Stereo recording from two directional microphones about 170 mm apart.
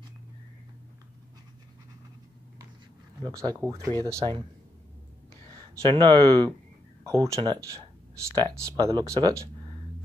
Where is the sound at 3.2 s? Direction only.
20° right (ahead or behind).